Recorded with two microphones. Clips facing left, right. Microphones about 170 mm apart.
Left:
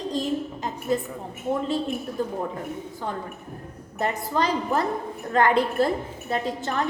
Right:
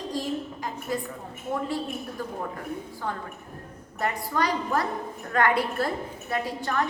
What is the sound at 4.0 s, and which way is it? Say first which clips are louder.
A woman's voice: left 2 dB; 25° left (ahead or behind).